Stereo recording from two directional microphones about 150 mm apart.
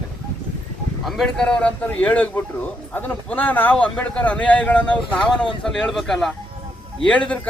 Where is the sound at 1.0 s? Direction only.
Centre (ahead or behind).